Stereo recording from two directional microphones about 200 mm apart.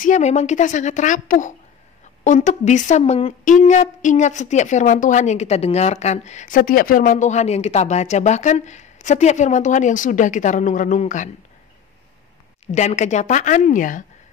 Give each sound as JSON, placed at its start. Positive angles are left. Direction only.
{"t": 0.0, "sound": "a woman's voice", "side_deg": 35}
{"t": 12.7, "sound": "a woman's voice", "side_deg": 35}